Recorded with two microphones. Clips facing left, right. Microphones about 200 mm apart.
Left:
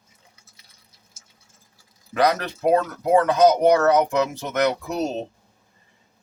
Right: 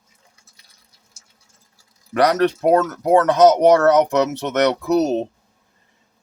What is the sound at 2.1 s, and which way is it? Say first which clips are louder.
A man's voice: right 5 dB; 75° right (ahead or behind).